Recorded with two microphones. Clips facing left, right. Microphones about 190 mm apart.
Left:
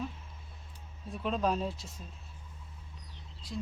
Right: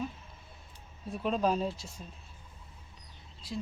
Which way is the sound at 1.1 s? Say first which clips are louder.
Right 2 dB; centre (ahead or behind).